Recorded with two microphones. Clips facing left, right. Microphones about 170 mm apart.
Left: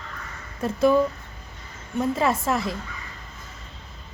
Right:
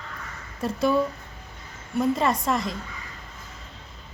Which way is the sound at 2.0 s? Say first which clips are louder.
Even; 5° left (ahead or behind).